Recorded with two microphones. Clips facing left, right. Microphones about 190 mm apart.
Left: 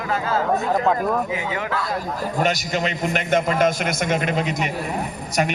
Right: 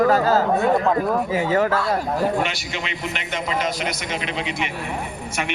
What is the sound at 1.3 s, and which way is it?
Speech, 40° right (ahead or behind).